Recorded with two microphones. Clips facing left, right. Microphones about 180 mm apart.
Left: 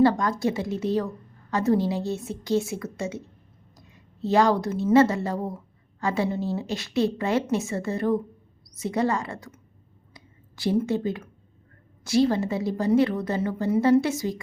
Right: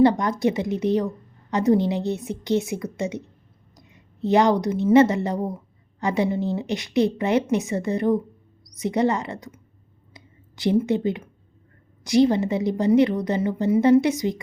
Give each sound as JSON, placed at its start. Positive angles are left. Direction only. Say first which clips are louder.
{"t": 0.0, "sound": "a woman's voice", "louder": "right 3 dB", "side_deg": -20}
{"t": 10.2, "sound": "a sound", "louder": "right 2 dB", "side_deg": -20}
{"t": 10.8, "sound": "a woman's voice", "louder": "right 3 dB", "side_deg": -20}